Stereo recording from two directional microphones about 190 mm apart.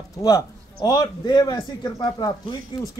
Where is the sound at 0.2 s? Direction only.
20° left (ahead or behind).